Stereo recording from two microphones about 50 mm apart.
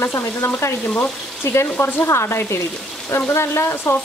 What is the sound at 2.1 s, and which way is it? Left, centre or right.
Speech, left.